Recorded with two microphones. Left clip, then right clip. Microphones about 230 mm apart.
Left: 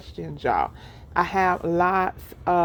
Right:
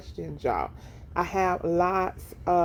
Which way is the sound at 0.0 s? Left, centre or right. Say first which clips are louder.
Left 3 dB; left.